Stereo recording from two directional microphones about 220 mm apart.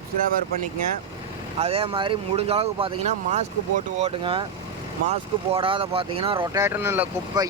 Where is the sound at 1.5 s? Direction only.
25° right (ahead or behind).